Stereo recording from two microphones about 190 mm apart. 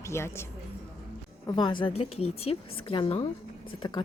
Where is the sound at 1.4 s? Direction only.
25° left (ahead or behind).